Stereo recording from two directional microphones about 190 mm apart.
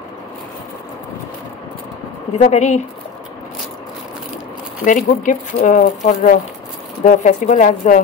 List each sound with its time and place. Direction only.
2.3 s speech: 35° left (ahead or behind)
4.8 s speech: 45° left (ahead or behind)